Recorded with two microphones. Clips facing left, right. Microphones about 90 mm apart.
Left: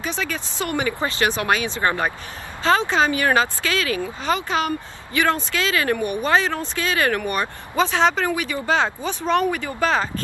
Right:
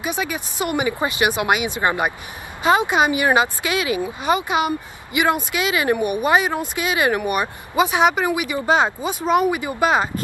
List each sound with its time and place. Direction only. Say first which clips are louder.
0.0 s speech: right 2 dB; 15° right (ahead or behind)